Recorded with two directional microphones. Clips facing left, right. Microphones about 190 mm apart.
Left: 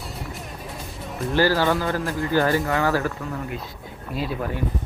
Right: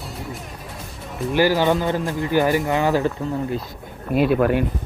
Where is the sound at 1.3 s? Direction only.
15° right (ahead or behind).